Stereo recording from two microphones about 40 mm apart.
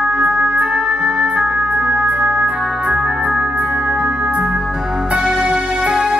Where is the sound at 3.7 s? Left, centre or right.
Centre.